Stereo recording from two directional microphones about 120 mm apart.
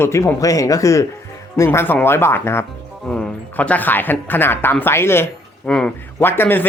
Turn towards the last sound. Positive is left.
turn(degrees=15)  # may be behind; listen again after turning